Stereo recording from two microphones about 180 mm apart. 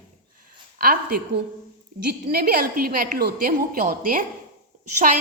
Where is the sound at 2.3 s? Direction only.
55° right (ahead or behind).